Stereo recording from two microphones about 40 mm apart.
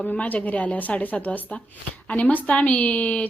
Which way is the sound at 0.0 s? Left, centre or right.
Left.